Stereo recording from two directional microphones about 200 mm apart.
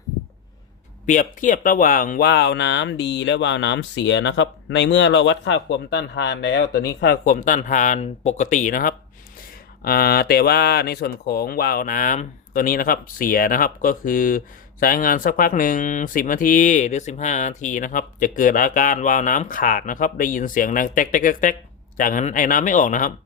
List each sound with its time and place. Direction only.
1.0 s speech: 40° left (ahead or behind)